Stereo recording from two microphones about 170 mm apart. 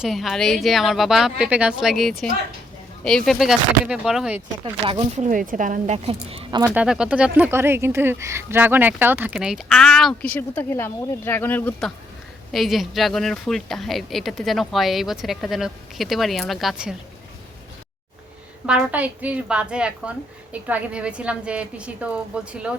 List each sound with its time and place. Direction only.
0.0 s speech: centre (ahead or behind)
4.6 s speech: 35° right (ahead or behind)
6.7 s speech: 5° right (ahead or behind); by 11.9 s 10° left (ahead or behind)
12.5 s speech: centre (ahead or behind)
18.6 s a woman's voice: 5° right (ahead or behind)